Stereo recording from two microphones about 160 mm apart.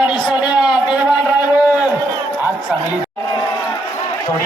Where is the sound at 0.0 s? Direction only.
30° left (ahead or behind).